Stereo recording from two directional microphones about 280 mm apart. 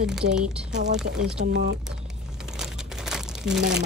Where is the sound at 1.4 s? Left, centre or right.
Right.